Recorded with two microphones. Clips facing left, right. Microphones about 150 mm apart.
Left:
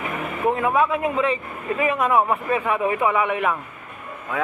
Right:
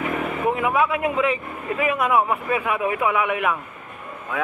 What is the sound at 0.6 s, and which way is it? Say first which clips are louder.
A man's voice: left 1 dB; 5° right (ahead or behind).